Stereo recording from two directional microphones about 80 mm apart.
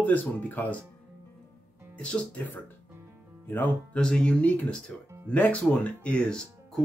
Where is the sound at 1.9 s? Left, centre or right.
Centre.